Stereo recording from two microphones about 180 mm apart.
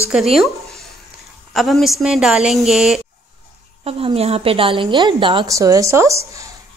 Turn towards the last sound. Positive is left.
turn(degrees=-15)  # may be behind; listen again after turning